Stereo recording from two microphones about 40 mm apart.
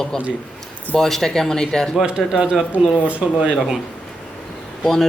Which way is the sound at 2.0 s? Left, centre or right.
Centre.